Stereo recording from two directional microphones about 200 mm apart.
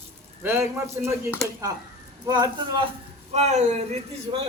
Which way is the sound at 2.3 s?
20° right (ahead or behind).